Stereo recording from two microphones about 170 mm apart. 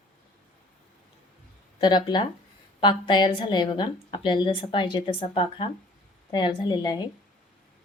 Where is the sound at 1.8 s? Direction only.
25° left (ahead or behind).